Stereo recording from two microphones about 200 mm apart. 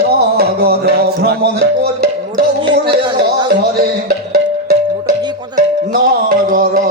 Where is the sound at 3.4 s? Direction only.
55° right (ahead or behind).